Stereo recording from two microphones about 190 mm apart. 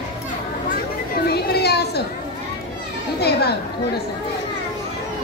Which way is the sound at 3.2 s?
60° left (ahead or behind).